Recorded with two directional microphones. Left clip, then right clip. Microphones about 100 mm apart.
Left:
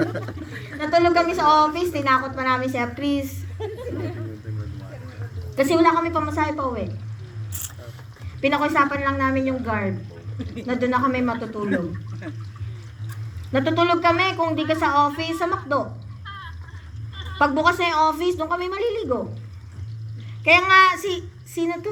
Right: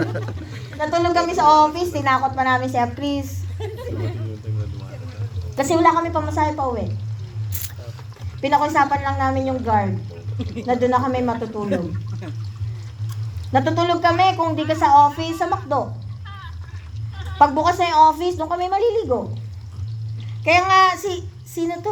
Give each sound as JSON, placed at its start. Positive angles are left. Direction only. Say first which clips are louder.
{"t": 0.0, "sound": "chuckle", "louder": "even", "side_deg": 20}
{"t": 0.8, "sound": "a woman's voice", "louder": "left 1 dB", "side_deg": -55}
{"t": 3.6, "sound": "a sound", "louder": "even", "side_deg": 15}
{"t": 5.5, "sound": "a woman's voice", "louder": "right 1 dB", "side_deg": -55}
{"t": 8.4, "sound": "a woman's voice", "louder": "right 2 dB", "side_deg": -55}
{"t": 10.3, "sound": "speech", "louder": "right 3 dB", "side_deg": -30}
{"t": 10.7, "sound": "a woman's voice", "louder": "right 3 dB", "side_deg": -55}
{"t": 13.5, "sound": "a woman's voice", "louder": "right 1 dB", "side_deg": -55}
{"t": 17.4, "sound": "a woman's voice", "louder": "right 3 dB", "side_deg": -55}
{"t": 20.4, "sound": "child singing", "louder": "even", "side_deg": -60}